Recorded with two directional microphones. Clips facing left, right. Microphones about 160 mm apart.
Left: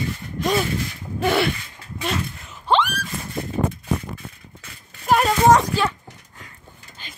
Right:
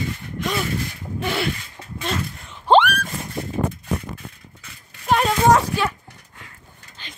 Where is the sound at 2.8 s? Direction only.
60° right (ahead or behind).